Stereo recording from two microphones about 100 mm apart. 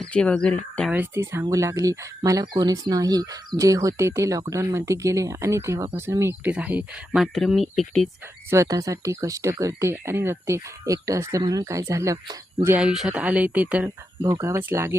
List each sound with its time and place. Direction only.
0.0 s speech: 10° left (ahead or behind)
0.9 s speech: 15° right (ahead or behind); by 8.1 s centre (ahead or behind)
8.4 s speech: 30° right (ahead or behind)
12.8 s speech: 5° right (ahead or behind)
14.4 s speech: 25° right (ahead or behind)